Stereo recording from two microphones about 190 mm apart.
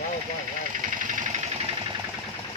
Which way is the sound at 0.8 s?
40° right (ahead or behind).